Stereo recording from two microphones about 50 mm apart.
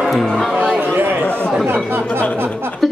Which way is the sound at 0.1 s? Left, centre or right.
Centre.